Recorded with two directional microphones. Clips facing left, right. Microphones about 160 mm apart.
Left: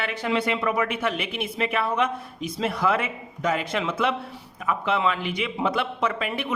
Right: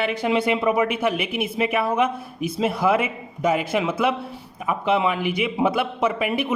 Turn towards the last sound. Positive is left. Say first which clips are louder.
# right 4 dB
turn(degrees=-10)  # may be behind; listen again after turning